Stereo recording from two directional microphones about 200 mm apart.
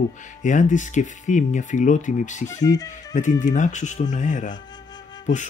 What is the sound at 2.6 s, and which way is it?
Speech, 20° left (ahead or behind).